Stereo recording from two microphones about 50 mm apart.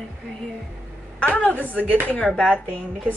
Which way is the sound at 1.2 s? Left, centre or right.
Left.